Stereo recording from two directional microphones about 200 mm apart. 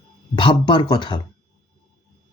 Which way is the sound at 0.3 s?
25° left (ahead or behind).